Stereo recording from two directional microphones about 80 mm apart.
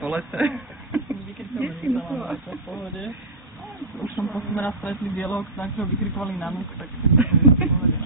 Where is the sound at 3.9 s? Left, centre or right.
Centre.